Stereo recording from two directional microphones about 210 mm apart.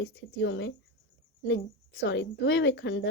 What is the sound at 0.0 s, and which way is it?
A woman's voice, 60° left (ahead or behind).